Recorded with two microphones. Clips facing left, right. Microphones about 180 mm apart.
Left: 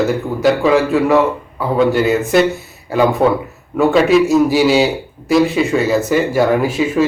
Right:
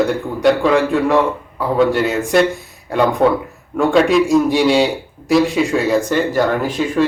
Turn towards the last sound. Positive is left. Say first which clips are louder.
# left 3 dB
turn(degrees=5)  # may be behind; listen again after turning